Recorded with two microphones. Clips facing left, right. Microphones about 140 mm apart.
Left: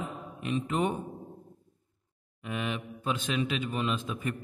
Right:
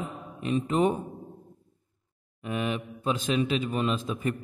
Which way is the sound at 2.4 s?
40° right (ahead or behind).